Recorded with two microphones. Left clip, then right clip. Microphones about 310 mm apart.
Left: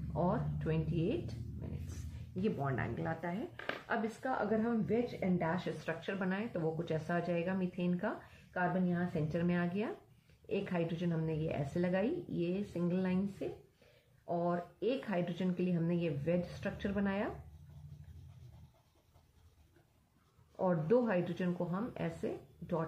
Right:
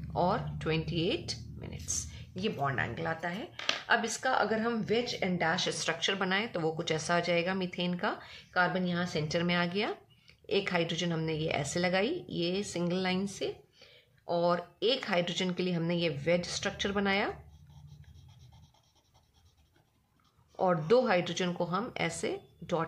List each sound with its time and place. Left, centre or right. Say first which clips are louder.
0.1 s a woman's voice: right 6 dB; right
20.5 s a woman's voice: right 6 dB; right